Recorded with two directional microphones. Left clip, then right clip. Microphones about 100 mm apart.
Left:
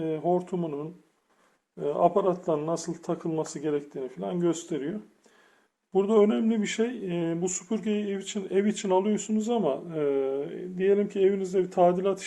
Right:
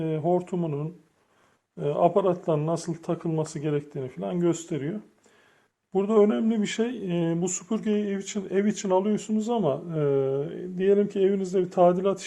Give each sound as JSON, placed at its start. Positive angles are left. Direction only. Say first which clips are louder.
{"t": 0.0, "sound": "speech", "louder": "right 1 dB", "side_deg": -25}
{"t": 6.5, "sound": "speech", "louder": "even", "side_deg": -25}